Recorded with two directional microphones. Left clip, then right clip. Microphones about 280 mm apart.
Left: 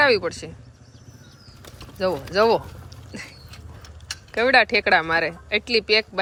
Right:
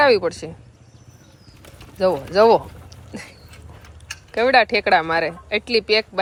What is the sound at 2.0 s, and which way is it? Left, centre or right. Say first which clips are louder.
Speech: right 5 dB; centre.